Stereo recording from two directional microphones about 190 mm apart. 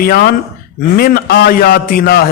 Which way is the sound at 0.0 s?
55° left (ahead or behind).